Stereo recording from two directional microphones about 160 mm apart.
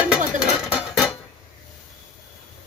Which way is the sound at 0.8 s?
5° right (ahead or behind).